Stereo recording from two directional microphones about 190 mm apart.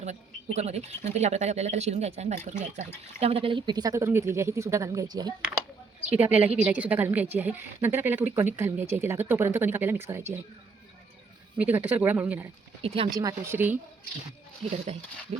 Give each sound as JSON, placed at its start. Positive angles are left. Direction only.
{"t": 0.0, "sound": "speech", "side_deg": -35}
{"t": 6.1, "sound": "speech", "side_deg": -10}
{"t": 11.5, "sound": "speech", "side_deg": -10}
{"t": 12.8, "sound": "speech", "side_deg": -30}
{"t": 13.1, "sound": "speech", "side_deg": -15}